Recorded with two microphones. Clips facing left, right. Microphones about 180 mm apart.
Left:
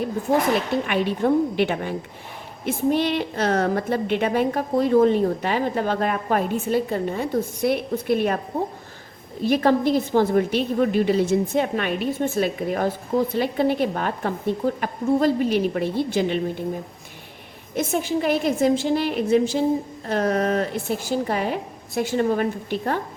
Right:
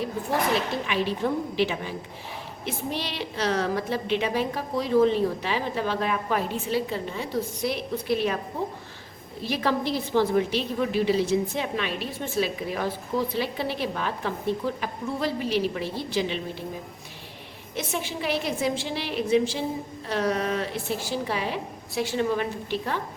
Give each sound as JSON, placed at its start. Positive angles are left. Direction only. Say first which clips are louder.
{"t": 0.9, "sound": "a woman's voice", "louder": "left 6 dB", "side_deg": 55}
{"t": 9.4, "sound": "a woman's voice", "louder": "left 7 dB", "side_deg": 50}
{"t": 17.7, "sound": "a woman's voice", "louder": "left 8 dB", "side_deg": 45}